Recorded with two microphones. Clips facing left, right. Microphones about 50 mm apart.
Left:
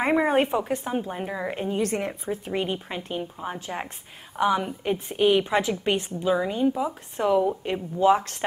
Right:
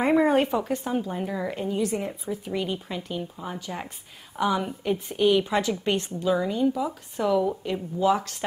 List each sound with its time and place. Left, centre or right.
0.1 s a woman's voice: centre
1.8 s speech: left
4.4 s a woman's voice: centre; by 8.5 s left